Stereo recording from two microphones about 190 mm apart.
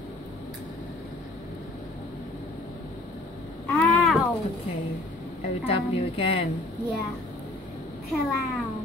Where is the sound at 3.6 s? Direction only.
10° left (ahead or behind).